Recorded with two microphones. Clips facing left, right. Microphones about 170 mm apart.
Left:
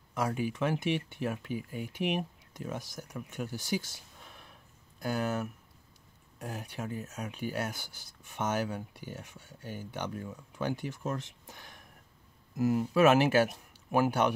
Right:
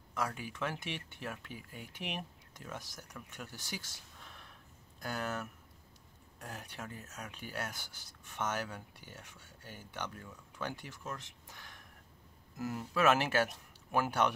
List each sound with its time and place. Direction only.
0.1 s speech: 15° left (ahead or behind)